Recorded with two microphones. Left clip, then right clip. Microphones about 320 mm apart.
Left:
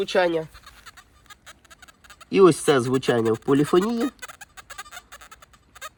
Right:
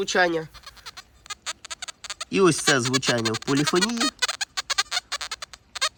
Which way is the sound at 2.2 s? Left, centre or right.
Centre.